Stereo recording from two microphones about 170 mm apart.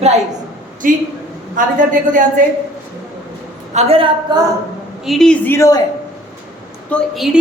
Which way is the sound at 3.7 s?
35° right (ahead or behind).